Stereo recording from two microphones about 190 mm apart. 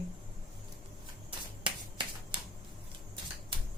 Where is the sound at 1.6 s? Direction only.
25° right (ahead or behind).